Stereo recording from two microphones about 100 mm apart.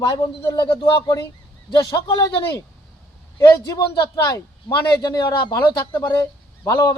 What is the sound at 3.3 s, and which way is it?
A man's voice, 45° left (ahead or behind).